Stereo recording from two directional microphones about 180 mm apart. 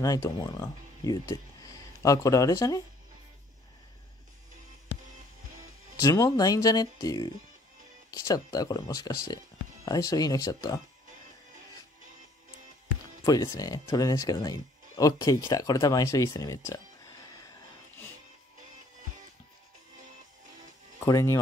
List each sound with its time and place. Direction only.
0.0 s speech: 20° left (ahead or behind)
5.9 s speech: 20° left (ahead or behind)
13.2 s speech: 20° left (ahead or behind)
21.0 s speech: 15° left (ahead or behind)